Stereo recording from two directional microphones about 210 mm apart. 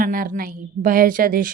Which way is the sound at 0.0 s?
40° right (ahead or behind).